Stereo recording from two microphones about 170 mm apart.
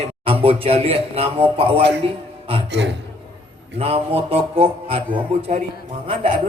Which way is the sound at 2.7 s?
90° right.